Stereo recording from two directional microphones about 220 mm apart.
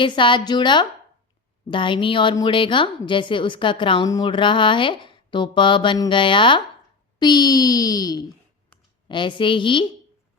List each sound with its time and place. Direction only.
0.0 s a woman's voice: 20° left (ahead or behind)